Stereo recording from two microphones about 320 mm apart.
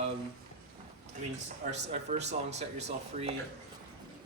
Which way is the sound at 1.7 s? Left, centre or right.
Right.